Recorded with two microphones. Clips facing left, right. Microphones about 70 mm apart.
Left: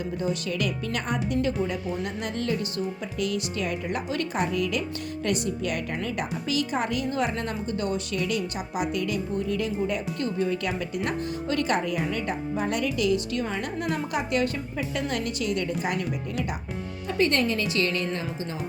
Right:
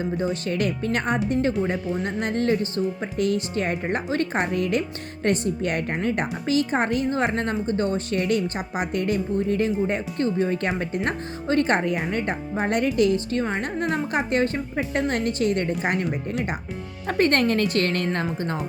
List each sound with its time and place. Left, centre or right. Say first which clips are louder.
0.4 s speech: right 4 dB; right